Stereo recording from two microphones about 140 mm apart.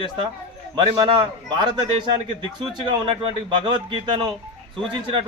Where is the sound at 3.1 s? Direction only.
35° right (ahead or behind).